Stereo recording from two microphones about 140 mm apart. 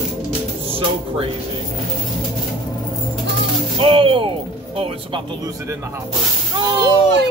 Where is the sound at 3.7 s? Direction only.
40° right (ahead or behind).